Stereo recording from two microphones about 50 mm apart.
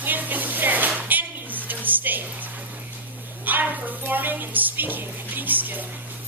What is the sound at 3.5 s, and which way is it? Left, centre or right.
Speech, right.